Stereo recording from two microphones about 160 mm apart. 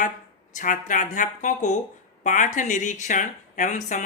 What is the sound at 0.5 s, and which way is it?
Speech, 55° left (ahead or behind).